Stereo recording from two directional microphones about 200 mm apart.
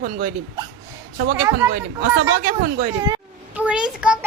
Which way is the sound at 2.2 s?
50° right (ahead or behind).